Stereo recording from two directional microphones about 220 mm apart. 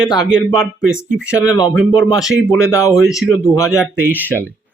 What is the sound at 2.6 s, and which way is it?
Speech, 15° left (ahead or behind).